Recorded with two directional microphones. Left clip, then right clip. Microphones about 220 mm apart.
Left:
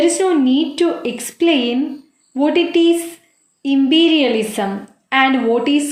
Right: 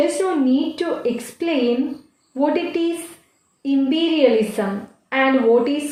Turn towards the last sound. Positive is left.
turn(degrees=35)  # may be behind; listen again after turning